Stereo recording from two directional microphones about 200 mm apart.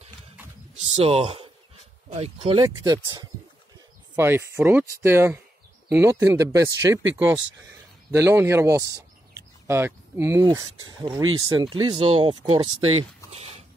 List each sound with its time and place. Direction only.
0.9 s speech: 30° right (ahead or behind)
8.1 s speech: 15° right (ahead or behind); by 13.0 s 30° right (ahead or behind)
13.3 s a sound: 30° right (ahead or behind)